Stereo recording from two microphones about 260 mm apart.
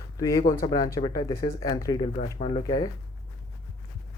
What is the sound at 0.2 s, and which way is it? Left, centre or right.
Speech, centre.